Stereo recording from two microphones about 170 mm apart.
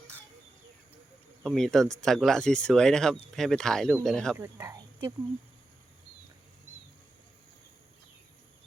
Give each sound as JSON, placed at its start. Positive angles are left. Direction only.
{"t": 1.5, "sound": "speech", "side_deg": 0}
{"t": 4.4, "sound": "speech", "side_deg": -15}